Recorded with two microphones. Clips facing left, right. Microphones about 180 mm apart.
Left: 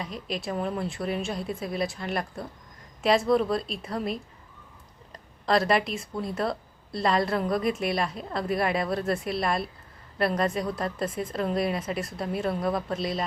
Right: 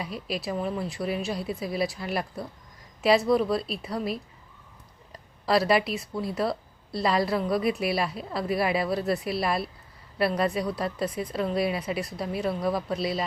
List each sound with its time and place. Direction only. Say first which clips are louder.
0.0 s a woman's voice: right 1 dB; 5° right (ahead or behind)
5.5 s a woman's voice: right 1 dB; 5° right (ahead or behind)